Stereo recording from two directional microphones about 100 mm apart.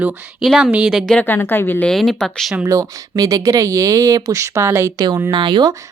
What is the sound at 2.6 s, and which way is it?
Speech, 30° right (ahead or behind).